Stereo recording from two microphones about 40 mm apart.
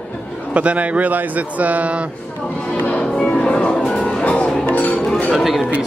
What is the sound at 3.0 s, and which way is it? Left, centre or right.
Music, left.